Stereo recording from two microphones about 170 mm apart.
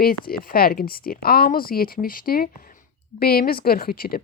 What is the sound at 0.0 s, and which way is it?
Speech, 60° left (ahead or behind).